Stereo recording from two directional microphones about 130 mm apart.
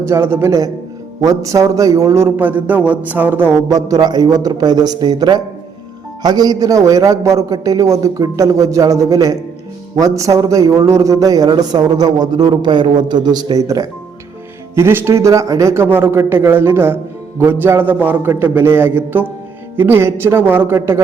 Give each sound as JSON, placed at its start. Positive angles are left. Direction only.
{"t": 0.0, "sound": "a man's voice", "side_deg": -20}
{"t": 3.7, "sound": "a man's voice", "side_deg": -30}